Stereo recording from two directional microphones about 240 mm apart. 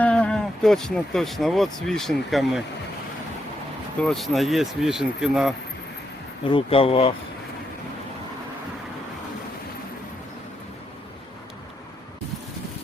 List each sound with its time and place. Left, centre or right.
0.0 s speech: centre
4.0 s speech: centre
6.5 s speech: left